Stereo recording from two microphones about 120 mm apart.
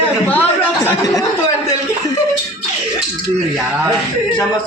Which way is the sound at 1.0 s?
30° left (ahead or behind).